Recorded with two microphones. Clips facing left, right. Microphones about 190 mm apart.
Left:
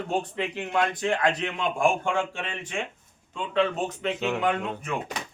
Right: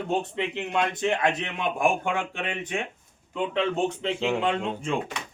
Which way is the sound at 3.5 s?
25° right (ahead or behind).